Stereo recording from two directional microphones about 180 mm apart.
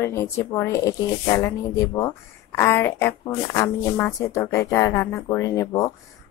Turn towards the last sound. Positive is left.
turn(degrees=15)  # may be behind; listen again after turning